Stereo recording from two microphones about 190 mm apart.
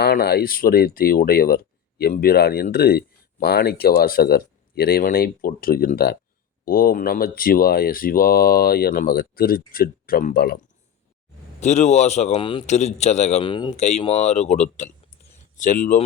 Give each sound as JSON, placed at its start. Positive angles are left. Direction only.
{"t": 0.0, "sound": "speech", "side_deg": 55}
{"t": 11.6, "sound": "a man's voice", "side_deg": 35}